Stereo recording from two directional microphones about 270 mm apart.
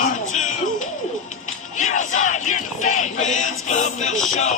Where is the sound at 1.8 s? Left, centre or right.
Left.